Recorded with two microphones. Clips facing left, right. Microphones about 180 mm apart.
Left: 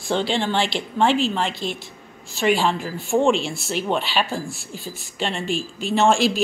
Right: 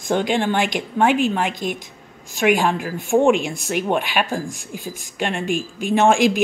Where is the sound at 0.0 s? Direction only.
15° right (ahead or behind).